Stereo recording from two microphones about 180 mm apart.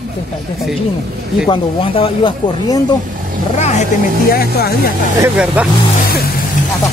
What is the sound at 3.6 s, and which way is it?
Speech, 40° left (ahead or behind).